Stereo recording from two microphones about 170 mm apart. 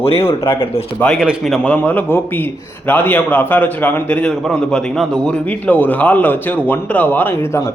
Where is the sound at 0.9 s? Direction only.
5° left (ahead or behind).